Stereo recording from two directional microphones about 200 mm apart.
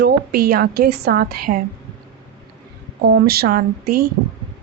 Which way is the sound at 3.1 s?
50° right (ahead or behind).